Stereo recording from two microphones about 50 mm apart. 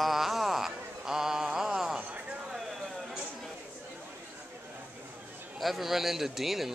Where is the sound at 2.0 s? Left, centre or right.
Right.